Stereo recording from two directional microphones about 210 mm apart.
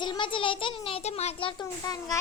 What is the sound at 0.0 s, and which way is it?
A child's voice, 20° left (ahead or behind).